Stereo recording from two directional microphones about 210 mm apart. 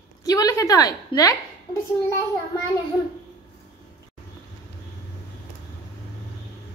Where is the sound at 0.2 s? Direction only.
15° left (ahead or behind).